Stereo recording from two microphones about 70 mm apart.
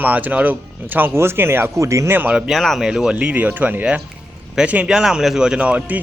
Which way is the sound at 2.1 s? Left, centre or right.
Right.